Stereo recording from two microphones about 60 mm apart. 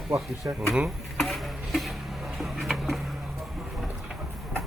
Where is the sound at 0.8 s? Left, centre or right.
Centre.